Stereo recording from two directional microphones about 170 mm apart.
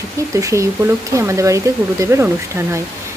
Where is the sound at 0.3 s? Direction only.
20° right (ahead or behind).